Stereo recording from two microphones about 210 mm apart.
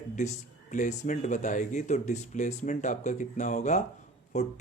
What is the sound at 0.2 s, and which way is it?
Speech, 35° left (ahead or behind).